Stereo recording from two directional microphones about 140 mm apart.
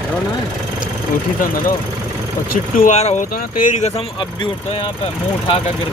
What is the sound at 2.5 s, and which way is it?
Speech, 90° left.